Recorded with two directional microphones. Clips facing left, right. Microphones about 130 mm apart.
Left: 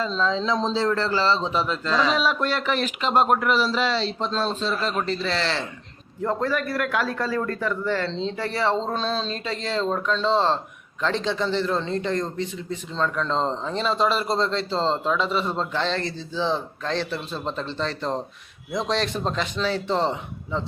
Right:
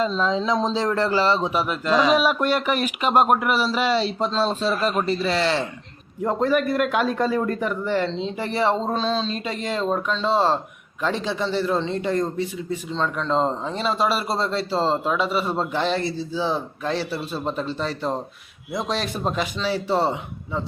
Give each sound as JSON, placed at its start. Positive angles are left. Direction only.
{"t": 0.2, "sound": "speech", "side_deg": -15}
{"t": 9.4, "sound": "speech", "side_deg": -15}